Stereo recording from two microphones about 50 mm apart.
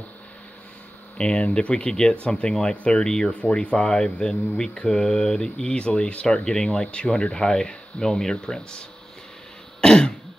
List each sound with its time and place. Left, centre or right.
1.1 s speech: centre
9.8 s throat clearing: centre